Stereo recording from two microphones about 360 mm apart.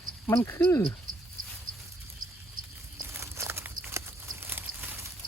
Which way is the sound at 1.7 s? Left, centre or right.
Right.